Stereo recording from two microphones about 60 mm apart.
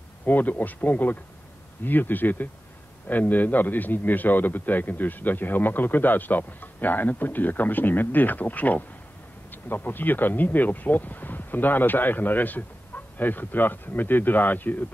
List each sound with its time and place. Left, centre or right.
0.2 s a man's voice: left